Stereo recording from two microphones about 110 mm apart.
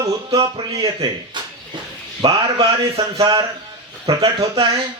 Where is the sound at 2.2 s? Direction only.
40° right (ahead or behind).